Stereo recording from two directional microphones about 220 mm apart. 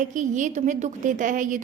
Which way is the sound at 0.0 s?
35° right (ahead or behind).